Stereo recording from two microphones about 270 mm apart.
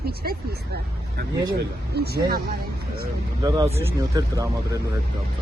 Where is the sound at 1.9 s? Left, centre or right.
Right.